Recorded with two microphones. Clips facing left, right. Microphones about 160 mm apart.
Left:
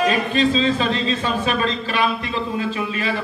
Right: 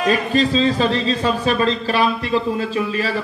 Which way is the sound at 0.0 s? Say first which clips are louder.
Right 1 dB; 40° right (ahead or behind).